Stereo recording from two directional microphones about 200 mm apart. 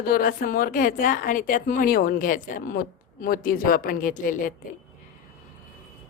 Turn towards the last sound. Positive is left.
turn(degrees=45)  # may be behind; listen again after turning